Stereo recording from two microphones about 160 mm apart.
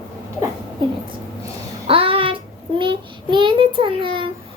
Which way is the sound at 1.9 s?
35° right (ahead or behind).